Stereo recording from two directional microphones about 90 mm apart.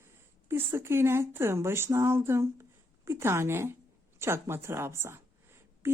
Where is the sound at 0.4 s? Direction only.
25° right (ahead or behind).